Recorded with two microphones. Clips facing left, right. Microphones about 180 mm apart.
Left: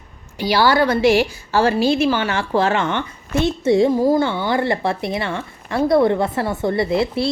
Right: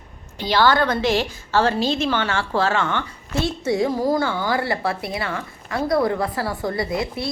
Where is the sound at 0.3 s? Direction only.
10° left (ahead or behind).